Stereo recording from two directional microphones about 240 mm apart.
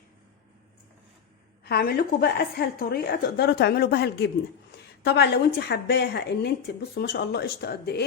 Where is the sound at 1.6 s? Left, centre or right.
Left.